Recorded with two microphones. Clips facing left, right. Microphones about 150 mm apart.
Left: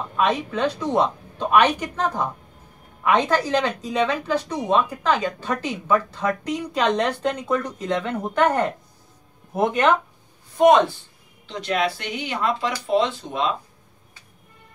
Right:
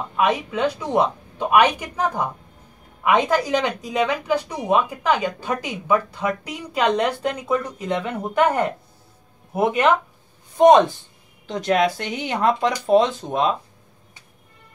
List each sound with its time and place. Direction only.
0.1 s a woman's voice: 10° right (ahead or behind)
10.6 s speech: 20° right (ahead or behind)
11.4 s speech: 45° right (ahead or behind)